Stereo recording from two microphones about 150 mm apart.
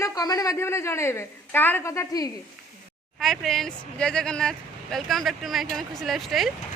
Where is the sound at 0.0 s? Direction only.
25° left (ahead or behind).